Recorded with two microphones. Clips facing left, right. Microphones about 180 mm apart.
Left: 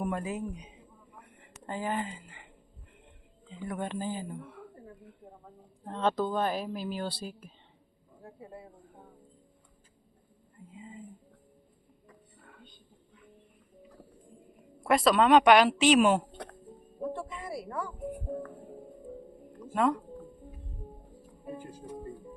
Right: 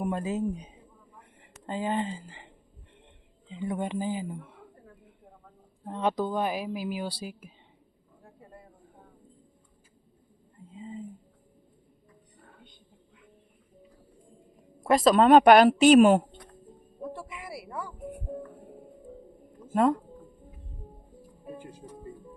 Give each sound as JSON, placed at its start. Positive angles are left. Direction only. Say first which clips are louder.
{"t": 0.0, "sound": "speech", "louder": "right 4 dB", "side_deg": -25}
{"t": 3.5, "sound": "speech", "louder": "right 4 dB", "side_deg": -20}
{"t": 5.8, "sound": "speech", "louder": "right 1 dB", "side_deg": -15}
{"t": 8.2, "sound": "a sound", "louder": "left 5 dB", "side_deg": 10}
{"t": 10.8, "sound": "a sound", "louder": "right 7 dB", "side_deg": -30}
{"t": 14.8, "sound": "speech", "louder": "right 3 dB", "side_deg": -40}
{"t": 17.2, "sound": "music", "louder": "left 3 dB", "side_deg": -10}